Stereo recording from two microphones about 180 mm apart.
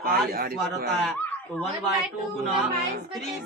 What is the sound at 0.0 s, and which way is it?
Speech, 55° right (ahead or behind).